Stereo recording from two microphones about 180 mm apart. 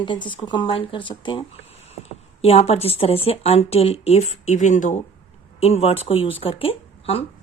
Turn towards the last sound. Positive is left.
turn(degrees=30)  # may be behind; listen again after turning